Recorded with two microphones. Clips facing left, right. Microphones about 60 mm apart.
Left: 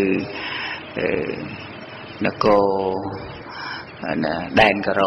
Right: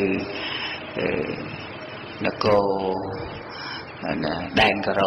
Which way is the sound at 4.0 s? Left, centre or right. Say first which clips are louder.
Left 3 dB; left.